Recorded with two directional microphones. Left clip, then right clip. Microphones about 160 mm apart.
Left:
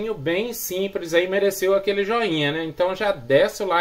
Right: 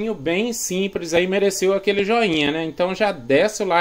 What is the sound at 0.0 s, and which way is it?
Speech, 35° right (ahead or behind).